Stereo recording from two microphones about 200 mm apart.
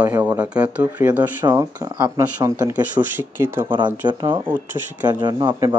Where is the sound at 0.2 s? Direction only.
10° right (ahead or behind).